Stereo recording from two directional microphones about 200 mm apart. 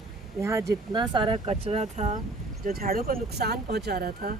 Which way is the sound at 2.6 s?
45° right (ahead or behind).